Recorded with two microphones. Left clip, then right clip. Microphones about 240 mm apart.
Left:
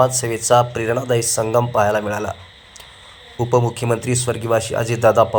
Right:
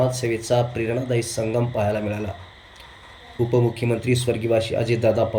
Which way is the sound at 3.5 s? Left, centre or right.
Centre.